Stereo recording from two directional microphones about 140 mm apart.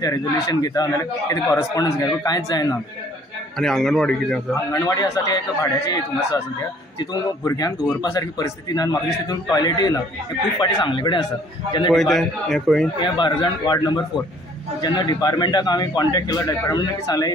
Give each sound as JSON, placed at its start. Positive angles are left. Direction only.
{"t": 0.0, "sound": "a man's voice", "side_deg": 25}
{"t": 3.5, "sound": "a man's voice", "side_deg": 5}
{"t": 4.6, "sound": "a man's voice", "side_deg": 25}
{"t": 11.9, "sound": "a man's voice", "side_deg": 0}
{"t": 13.0, "sound": "a man's voice", "side_deg": 35}